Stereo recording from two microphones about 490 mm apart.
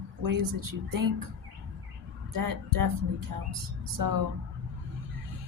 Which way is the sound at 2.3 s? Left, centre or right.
Right.